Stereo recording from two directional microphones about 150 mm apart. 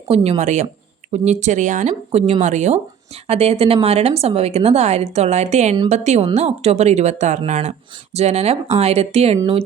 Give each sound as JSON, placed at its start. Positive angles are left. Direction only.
{"t": 0.1, "sound": "speech", "side_deg": -45}